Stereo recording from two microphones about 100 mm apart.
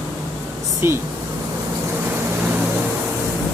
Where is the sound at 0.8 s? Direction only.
25° right (ahead or behind).